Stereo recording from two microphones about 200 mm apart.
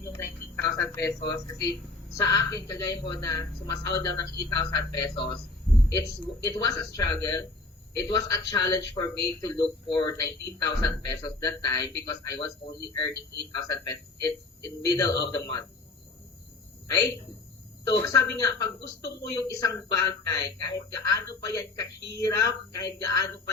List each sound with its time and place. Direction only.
0.0 s a woman's voice: 15° left (ahead or behind)
17.8 s speech: 15° left (ahead or behind)